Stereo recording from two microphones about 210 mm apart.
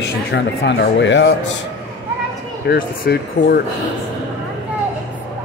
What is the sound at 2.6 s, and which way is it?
Speech, 50° left (ahead or behind).